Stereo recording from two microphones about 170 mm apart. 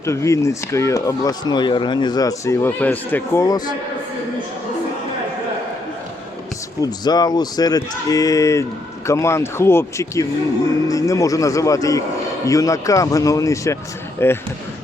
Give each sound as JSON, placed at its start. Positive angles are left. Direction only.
{"t": 0.0, "sound": "speech", "side_deg": 15}
{"t": 6.8, "sound": "speech", "side_deg": 25}